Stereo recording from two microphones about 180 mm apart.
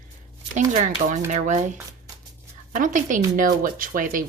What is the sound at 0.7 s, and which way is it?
Speech, 40° right (ahead or behind).